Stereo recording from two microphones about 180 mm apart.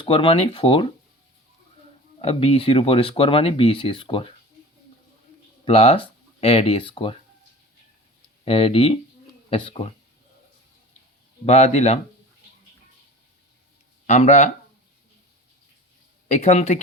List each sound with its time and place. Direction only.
0.0 s speech: 30° left (ahead or behind)
2.2 s speech: 35° left (ahead or behind)
5.6 s speech: 35° left (ahead or behind)
8.4 s speech: 30° left (ahead or behind)
11.4 s speech: 35° left (ahead or behind)
14.1 s speech: 40° left (ahead or behind)
16.3 s speech: 40° left (ahead or behind)